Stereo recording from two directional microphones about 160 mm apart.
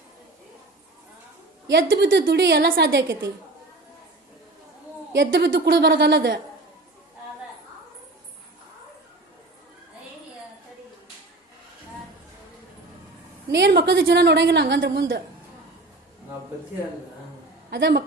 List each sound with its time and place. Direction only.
1.7 s a woman's voice: 90° right
3.1 s a woman's voice: 15° right (ahead or behind)
5.1 s a woman's voice: 90° right
13.5 s a woman's voice: 90° right
17.7 s a woman's voice: 90° right